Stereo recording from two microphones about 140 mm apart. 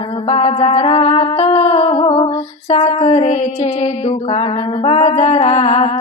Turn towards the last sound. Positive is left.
turn(degrees=55)  # may be behind; listen again after turning